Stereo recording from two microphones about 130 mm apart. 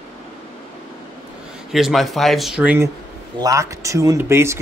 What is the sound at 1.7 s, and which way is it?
Speech, centre (ahead or behind).